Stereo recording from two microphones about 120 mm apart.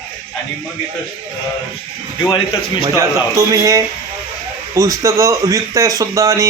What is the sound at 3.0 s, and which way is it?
Speech, 30° right (ahead or behind).